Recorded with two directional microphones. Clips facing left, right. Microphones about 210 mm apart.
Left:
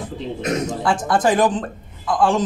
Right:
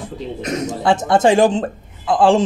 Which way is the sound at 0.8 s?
25° right (ahead or behind).